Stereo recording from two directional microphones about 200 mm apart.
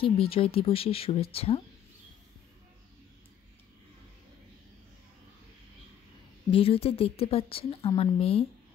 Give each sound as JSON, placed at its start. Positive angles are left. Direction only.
{"t": 0.0, "sound": "a woman's voice", "side_deg": 30}
{"t": 6.5, "sound": "a woman's voice", "side_deg": 30}